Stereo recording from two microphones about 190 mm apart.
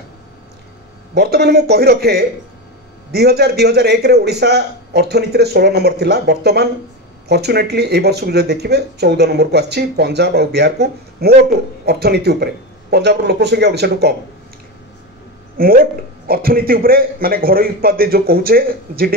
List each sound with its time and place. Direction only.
1.1 s speech: 55° right (ahead or behind)
15.5 s a man's voice: 50° right (ahead or behind)